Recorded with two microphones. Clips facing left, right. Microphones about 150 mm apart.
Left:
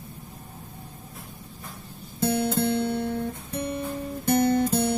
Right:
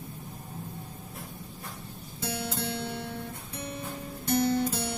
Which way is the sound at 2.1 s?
50° left (ahead or behind).